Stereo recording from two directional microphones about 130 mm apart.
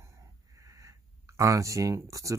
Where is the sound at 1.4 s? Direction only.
25° right (ahead or behind).